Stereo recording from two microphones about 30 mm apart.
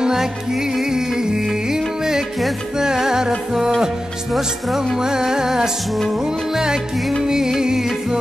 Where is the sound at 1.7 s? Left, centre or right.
Centre.